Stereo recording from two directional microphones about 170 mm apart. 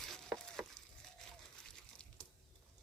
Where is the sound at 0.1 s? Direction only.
Centre (ahead or behind).